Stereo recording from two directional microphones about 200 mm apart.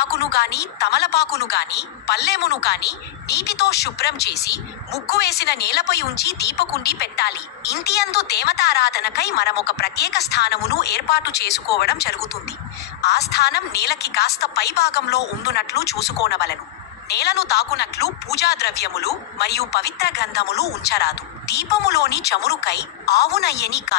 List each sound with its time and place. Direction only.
0.1 s speech: 55° left (ahead or behind)